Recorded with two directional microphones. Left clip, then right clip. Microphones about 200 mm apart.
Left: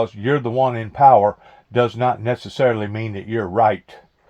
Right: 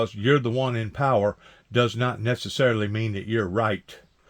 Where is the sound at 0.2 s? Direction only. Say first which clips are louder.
Left 4 dB; 35° right (ahead or behind).